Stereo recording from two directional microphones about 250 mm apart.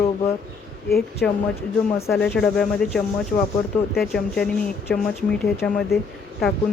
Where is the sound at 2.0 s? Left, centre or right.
Centre.